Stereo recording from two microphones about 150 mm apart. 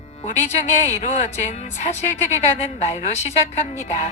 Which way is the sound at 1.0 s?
55° left (ahead or behind).